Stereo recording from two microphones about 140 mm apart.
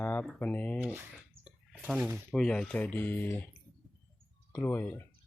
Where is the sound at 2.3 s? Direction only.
5° left (ahead or behind).